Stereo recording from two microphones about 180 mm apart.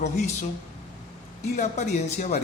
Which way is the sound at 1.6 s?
40° left (ahead or behind).